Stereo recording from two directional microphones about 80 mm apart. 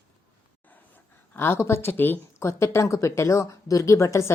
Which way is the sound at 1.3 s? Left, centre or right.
Left.